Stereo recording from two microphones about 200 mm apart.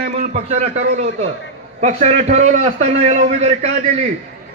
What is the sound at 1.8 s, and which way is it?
A man's voice, 35° right (ahead or behind).